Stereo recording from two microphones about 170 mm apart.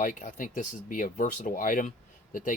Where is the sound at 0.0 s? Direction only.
50° left (ahead or behind).